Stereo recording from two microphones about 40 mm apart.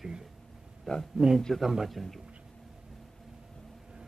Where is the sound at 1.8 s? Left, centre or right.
Centre.